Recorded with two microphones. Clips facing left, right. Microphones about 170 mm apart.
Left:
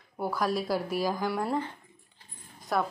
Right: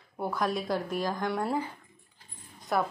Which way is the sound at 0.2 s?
Centre (ahead or behind).